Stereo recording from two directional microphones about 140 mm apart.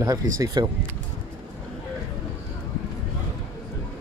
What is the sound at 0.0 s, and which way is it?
Speech, 30° right (ahead or behind).